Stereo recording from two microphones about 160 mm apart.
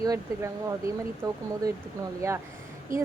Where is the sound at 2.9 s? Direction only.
55° right (ahead or behind).